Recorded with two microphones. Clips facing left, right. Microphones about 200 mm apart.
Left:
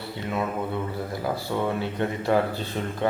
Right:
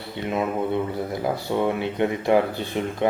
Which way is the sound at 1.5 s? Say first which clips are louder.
Right 4 dB; 20° right (ahead or behind).